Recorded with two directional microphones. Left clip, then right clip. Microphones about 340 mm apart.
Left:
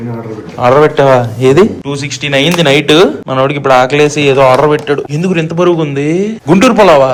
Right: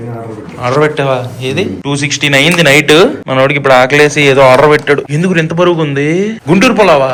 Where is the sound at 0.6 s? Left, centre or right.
Centre.